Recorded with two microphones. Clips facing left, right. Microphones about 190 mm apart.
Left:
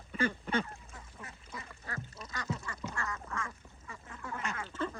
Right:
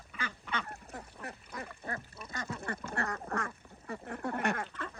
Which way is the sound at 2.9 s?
60° right (ahead or behind).